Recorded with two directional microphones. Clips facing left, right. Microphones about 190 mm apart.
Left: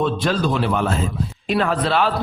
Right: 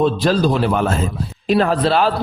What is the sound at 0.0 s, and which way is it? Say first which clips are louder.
A man's voice: right 4 dB; 35° right (ahead or behind).